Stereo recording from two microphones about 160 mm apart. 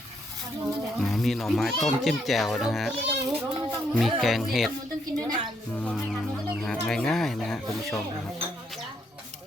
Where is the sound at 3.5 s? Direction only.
25° right (ahead or behind).